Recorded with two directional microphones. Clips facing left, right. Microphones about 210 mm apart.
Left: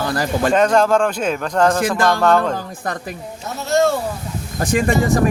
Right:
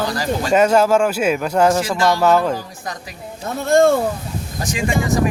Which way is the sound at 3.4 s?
50° right (ahead or behind).